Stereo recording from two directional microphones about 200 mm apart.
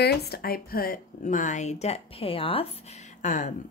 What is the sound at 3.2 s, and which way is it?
Speech, 40° left (ahead or behind).